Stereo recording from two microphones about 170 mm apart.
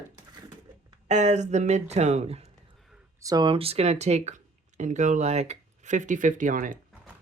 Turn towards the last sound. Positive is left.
turn(degrees=-50)  # may be behind; listen again after turning